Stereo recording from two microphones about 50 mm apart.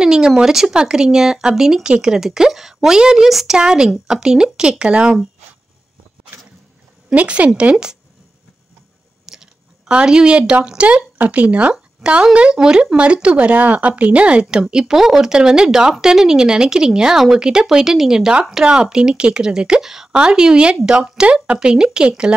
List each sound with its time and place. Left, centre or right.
0.0 s a sound: centre
0.4 s a woman's voice: centre
7.2 s speech: right
7.7 s speech: centre
9.2 s chewing: centre
9.8 s speech: centre
11.7 s a woman's voice: centre
14.4 s a woman's voice: centre